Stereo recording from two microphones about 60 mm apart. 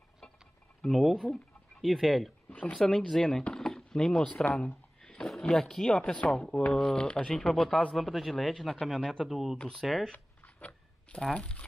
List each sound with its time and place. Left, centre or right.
0.8 s speech: centre
1.2 s a sound: centre
1.9 s speech: centre
4.6 s a sound: centre
5.4 s speech: centre
9.0 s speech: centre
9.3 s speech: centre
10.1 s writing: left
11.3 s speech: left